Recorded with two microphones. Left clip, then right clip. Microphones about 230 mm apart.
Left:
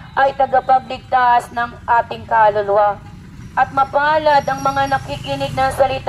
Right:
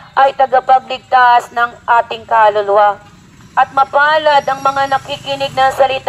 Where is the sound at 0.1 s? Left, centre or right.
Right.